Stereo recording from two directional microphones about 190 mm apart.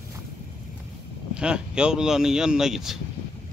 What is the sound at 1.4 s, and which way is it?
Speech, 5° right (ahead or behind).